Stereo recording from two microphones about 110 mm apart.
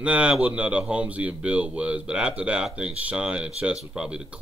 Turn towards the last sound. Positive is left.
turn(degrees=-5)  # may be behind; listen again after turning